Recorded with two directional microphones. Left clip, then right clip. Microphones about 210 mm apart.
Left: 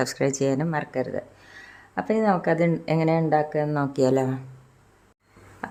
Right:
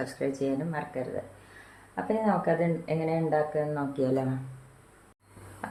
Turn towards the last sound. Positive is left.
turn(degrees=50)  # may be behind; listen again after turning